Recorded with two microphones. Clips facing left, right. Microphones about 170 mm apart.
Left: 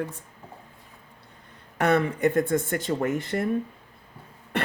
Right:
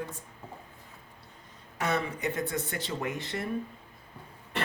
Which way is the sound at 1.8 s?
60° left (ahead or behind).